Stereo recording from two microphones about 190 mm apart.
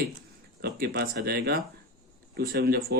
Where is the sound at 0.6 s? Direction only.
55° right (ahead or behind).